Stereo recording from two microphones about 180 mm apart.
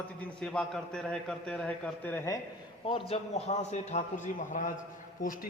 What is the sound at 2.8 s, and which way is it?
A man's voice, 30° left (ahead or behind).